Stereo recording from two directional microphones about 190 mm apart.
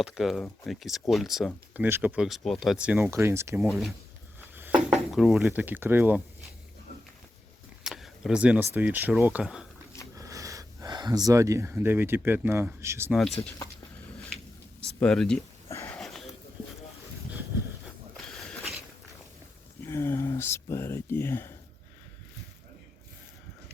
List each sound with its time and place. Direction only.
0.0 s speech: centre (ahead or behind)
3.7 s speech: centre (ahead or behind)
4.4 s a sound: 10° right (ahead or behind)
4.9 s speech: centre (ahead or behind)
7.9 s a sound: centre (ahead or behind)
8.7 s speech: 10° right (ahead or behind)
10.2 s speech: 20° right (ahead or behind)
15.0 s speech: 5° left (ahead or behind)
15.7 s wheeze: 10° left (ahead or behind)
19.8 s a sound: 15° left (ahead or behind)